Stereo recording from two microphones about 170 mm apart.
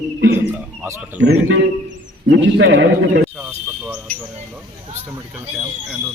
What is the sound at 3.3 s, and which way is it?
Snake, 5° right (ahead or behind).